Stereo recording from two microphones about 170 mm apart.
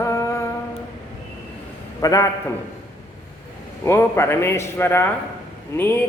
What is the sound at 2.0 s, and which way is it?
Speech, 20° left (ahead or behind).